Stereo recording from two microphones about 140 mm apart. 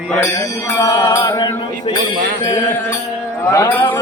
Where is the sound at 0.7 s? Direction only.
25° left (ahead or behind).